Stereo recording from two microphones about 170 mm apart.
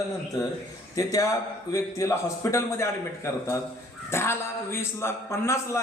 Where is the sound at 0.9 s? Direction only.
20° left (ahead or behind).